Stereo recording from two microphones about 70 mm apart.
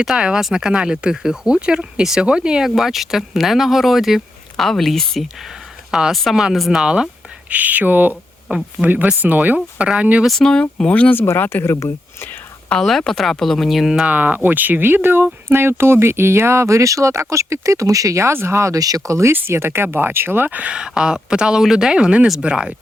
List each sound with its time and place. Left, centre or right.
0.0 s speech: centre
7.5 s speech: right
8.4 s speech: centre
9.2 s speech: right
10.2 s speech: centre
11.1 s speech: left
12.8 s speech: centre
14.1 s speech: right
18.8 s speech: right
19.3 s speech: right; by 22.7 s centre